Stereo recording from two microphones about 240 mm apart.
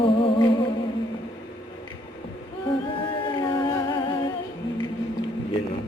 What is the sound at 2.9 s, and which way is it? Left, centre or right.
Humming, left.